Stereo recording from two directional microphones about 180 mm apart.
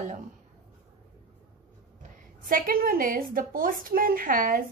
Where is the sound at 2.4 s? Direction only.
50° right (ahead or behind).